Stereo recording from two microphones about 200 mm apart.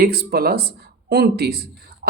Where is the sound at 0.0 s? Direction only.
50° right (ahead or behind).